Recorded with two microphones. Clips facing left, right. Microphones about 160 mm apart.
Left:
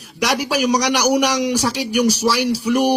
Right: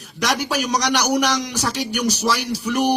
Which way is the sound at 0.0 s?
10° left (ahead or behind).